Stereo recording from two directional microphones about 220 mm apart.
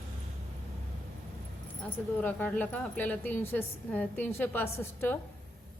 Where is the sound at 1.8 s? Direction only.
10° left (ahead or behind).